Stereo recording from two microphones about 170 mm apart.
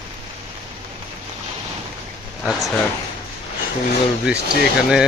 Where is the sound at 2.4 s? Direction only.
Centre (ahead or behind).